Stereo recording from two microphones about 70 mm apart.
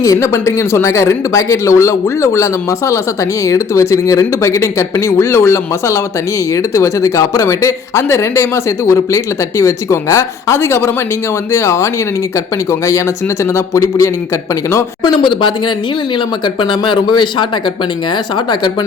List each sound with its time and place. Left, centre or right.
0.0 s speech: left
7.4 s speech: left
13.4 s speech: left
15.0 s speech: left
18.3 s speech: left